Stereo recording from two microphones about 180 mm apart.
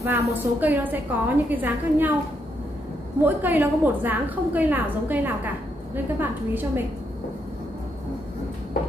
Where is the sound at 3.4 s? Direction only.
10° right (ahead or behind).